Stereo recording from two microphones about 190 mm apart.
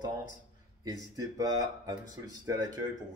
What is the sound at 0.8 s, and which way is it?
Speech, 20° right (ahead or behind).